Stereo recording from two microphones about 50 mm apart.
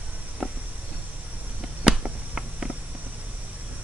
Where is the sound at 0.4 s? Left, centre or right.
Centre.